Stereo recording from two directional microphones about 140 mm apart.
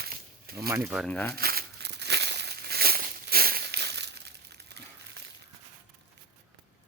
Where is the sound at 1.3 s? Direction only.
90° right.